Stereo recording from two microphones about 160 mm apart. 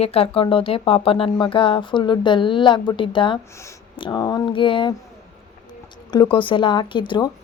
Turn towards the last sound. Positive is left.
turn(degrees=30)  # may be behind; listen again after turning